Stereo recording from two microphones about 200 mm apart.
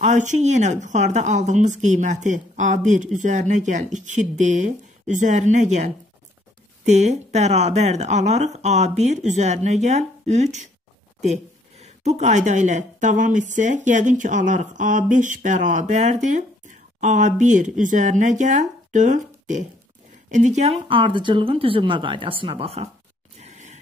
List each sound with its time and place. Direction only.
0.0 s a woman's voice: 35° right (ahead or behind)
11.8 s a woman's voice: 35° right (ahead or behind)
23.4 s a sound: 35° right (ahead or behind)